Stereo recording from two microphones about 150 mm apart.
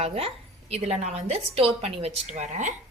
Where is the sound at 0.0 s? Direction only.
40° right (ahead or behind).